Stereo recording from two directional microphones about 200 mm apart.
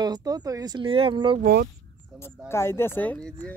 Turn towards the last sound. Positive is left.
turn(degrees=5)  # may be behind; listen again after turning